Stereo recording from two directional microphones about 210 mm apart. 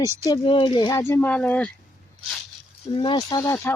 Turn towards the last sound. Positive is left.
turn(degrees=15)  # may be behind; listen again after turning